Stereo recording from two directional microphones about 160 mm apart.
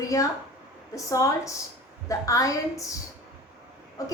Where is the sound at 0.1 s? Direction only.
20° left (ahead or behind).